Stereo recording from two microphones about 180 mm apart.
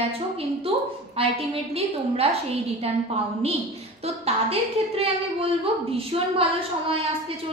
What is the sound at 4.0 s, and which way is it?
A woman's voice, 35° right (ahead or behind).